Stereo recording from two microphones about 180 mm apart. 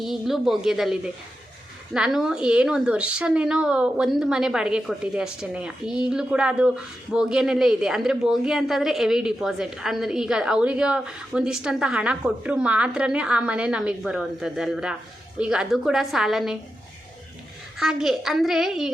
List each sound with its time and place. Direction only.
0.0 s a woman's voice: centre (ahead or behind)
17.7 s a woman's voice: centre (ahead or behind)